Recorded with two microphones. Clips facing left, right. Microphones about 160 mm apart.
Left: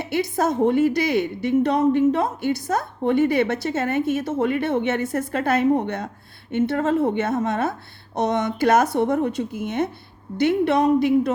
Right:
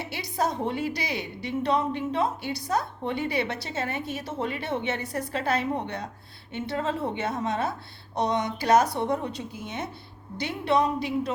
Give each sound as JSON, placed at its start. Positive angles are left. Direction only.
{"t": 0.0, "sound": "a woman's voice", "side_deg": 50}